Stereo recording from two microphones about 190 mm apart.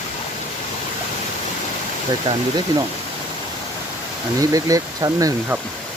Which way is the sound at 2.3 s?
35° right (ahead or behind).